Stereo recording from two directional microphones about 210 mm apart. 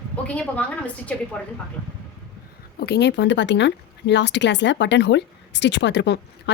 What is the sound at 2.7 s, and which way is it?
Speech, 50° left (ahead or behind).